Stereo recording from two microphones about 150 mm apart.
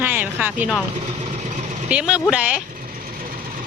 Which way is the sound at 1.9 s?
5° right (ahead or behind).